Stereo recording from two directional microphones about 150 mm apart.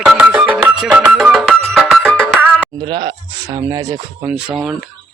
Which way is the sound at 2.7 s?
35° right (ahead or behind).